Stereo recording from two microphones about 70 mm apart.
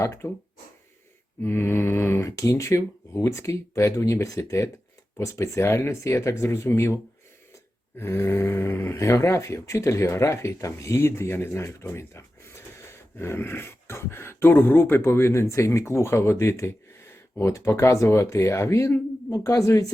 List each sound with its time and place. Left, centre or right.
0.0 s speech: left
1.4 s speech: left
2.3 s speech: left